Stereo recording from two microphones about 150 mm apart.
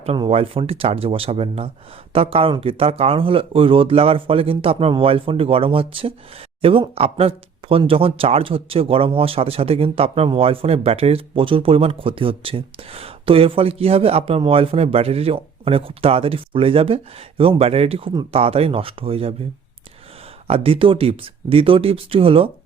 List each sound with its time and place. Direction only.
0.2 s speech: 40° right (ahead or behind)
20.5 s speech: 35° right (ahead or behind)